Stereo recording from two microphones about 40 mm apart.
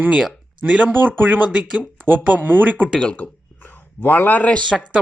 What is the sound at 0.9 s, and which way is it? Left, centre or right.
Speech, right.